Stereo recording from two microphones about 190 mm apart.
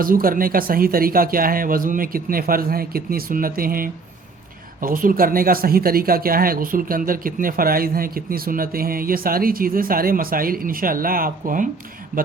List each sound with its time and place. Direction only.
0.0 s speech: 50° right (ahead or behind)